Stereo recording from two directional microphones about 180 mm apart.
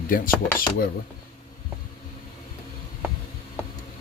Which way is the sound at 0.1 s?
50° left (ahead or behind).